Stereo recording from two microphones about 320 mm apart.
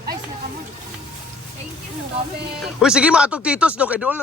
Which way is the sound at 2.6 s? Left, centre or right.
Centre.